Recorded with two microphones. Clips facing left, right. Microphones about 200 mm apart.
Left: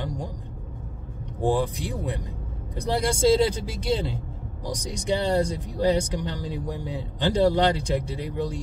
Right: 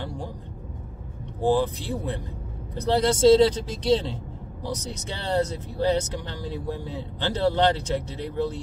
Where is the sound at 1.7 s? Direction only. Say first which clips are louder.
Right 1 dB; 15° left (ahead or behind).